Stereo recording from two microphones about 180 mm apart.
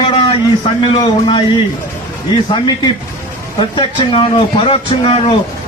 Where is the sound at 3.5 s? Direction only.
30° left (ahead or behind).